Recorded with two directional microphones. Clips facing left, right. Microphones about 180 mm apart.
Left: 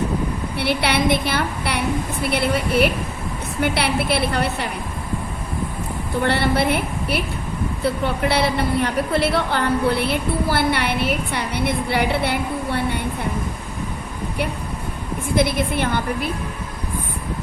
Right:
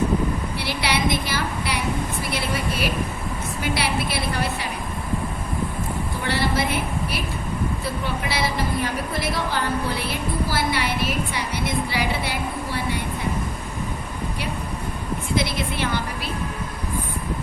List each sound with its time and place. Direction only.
0.6 s a woman's voice: 60° left (ahead or behind)
6.2 s a woman's voice: 60° left (ahead or behind)
15.4 s a woman's voice: 55° left (ahead or behind)